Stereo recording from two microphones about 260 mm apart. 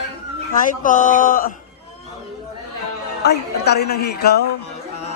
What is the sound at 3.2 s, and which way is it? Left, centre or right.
Speech, left.